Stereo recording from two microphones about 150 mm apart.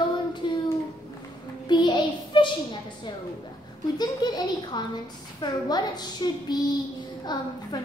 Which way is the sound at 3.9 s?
25° left (ahead or behind).